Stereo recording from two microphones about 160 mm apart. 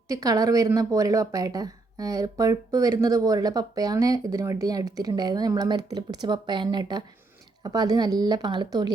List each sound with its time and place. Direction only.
0.1 s speech: 20° right (ahead or behind)